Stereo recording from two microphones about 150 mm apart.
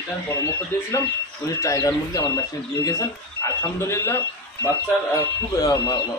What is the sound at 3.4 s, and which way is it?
Speech, 20° left (ahead or behind).